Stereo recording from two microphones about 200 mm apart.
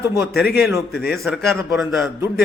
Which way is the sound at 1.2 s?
5° right (ahead or behind).